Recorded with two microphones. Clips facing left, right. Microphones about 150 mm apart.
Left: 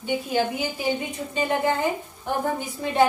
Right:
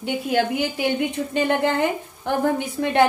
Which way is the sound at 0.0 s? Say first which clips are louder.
Right 2 dB; 70° right (ahead or behind).